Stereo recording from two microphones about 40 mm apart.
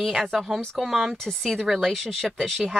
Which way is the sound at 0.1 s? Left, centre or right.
Centre.